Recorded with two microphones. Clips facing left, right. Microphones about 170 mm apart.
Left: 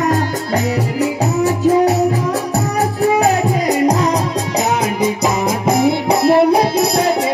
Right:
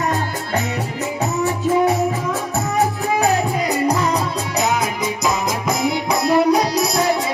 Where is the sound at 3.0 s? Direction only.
35° left (ahead or behind).